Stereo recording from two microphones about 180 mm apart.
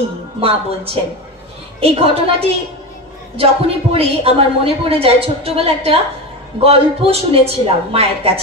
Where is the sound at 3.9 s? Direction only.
30° right (ahead or behind).